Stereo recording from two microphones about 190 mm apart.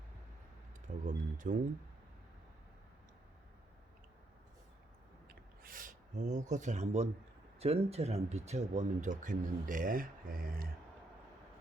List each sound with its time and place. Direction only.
1.0 s speech: 40° right (ahead or behind)
5.3 s a sound: 45° right (ahead or behind)
7.6 s speech: 35° right (ahead or behind); by 10.7 s 50° right (ahead or behind)